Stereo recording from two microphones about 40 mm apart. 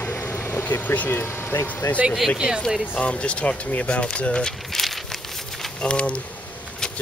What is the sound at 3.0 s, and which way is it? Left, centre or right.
Speech, left.